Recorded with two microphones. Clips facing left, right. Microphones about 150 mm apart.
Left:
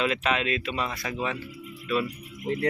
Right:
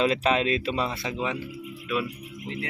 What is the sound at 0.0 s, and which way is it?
Speech, 35° right (ahead or behind).